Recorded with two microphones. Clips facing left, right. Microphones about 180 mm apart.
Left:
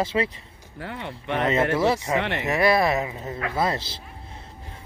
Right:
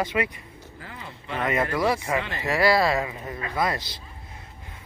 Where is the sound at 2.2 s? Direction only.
75° left (ahead or behind).